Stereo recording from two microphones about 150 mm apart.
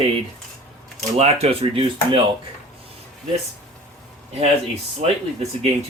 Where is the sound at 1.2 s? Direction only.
40° right (ahead or behind).